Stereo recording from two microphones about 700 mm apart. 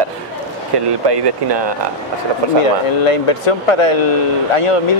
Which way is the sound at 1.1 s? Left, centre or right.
Right.